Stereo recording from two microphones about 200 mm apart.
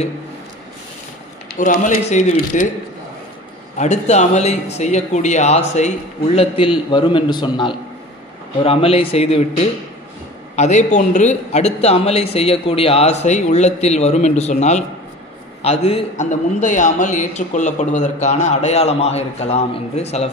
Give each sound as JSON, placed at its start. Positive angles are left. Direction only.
{"t": 1.5, "sound": "a man's voice", "side_deg": 40}
{"t": 3.7, "sound": "a man's voice", "side_deg": 35}